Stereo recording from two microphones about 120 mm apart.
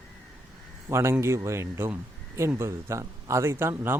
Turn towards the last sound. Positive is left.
turn(degrees=-20)  # may be behind; listen again after turning